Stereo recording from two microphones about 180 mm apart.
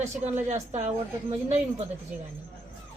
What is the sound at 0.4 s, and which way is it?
Speech, 40° right (ahead or behind).